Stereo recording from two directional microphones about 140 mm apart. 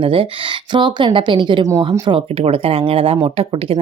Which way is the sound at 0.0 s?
40° right (ahead or behind).